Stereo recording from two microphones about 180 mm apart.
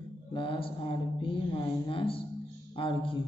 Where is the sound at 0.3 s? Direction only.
30° left (ahead or behind).